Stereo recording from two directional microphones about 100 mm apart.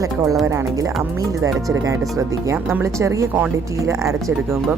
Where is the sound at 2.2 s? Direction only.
30° right (ahead or behind).